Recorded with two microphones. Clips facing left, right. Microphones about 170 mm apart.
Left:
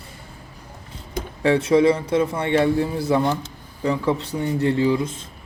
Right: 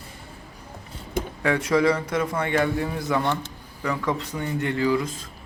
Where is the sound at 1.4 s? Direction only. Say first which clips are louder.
Left 5 dB; 25° left (ahead or behind).